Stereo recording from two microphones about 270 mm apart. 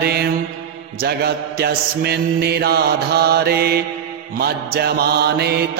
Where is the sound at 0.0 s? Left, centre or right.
Right.